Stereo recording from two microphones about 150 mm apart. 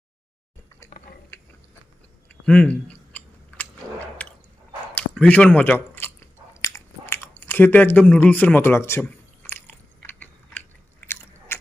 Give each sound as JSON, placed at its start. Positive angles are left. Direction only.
{"t": 2.5, "sound": "chewing", "side_deg": 10}
{"t": 4.2, "sound": "drip", "side_deg": 10}
{"t": 4.9, "sound": "chewing", "side_deg": 10}
{"t": 9.5, "sound": "biting", "side_deg": 15}